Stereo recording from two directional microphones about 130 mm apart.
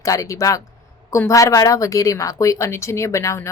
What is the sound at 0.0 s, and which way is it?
A woman's voice, 25° left (ahead or behind).